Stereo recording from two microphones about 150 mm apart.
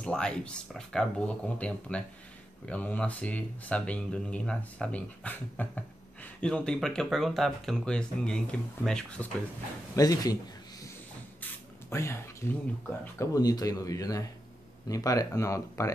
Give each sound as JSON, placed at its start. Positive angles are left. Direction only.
{"t": 0.0, "sound": "speech", "side_deg": 5}
{"t": 9.9, "sound": "speech", "side_deg": 25}
{"t": 11.9, "sound": "speech", "side_deg": 20}